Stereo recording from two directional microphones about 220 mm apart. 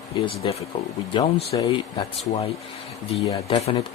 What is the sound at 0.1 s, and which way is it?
Speech, 20° left (ahead or behind).